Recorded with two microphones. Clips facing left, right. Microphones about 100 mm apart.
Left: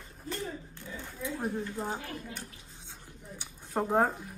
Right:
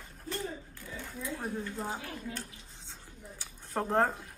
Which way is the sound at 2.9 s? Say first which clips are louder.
Left 2 dB; 15° left (ahead or behind).